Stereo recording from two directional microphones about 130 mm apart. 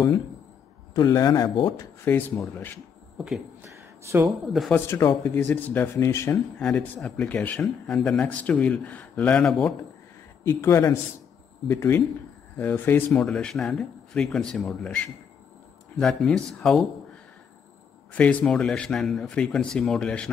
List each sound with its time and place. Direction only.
0.9 s speech: 30° left (ahead or behind)
2.0 s a man's voice: 15° left (ahead or behind)
3.2 s speech: 5° right (ahead or behind)
3.6 s a sound: 20° right (ahead or behind)
4.4 s speech: centre (ahead or behind)
4.7 s speech: 20° left (ahead or behind)
6.6 s a man's voice: 10° left (ahead or behind)
10.4 s a man's voice: 20° left (ahead or behind); by 16.8 s 5° left (ahead or behind)
18.1 s a man's voice: 10° left (ahead or behind)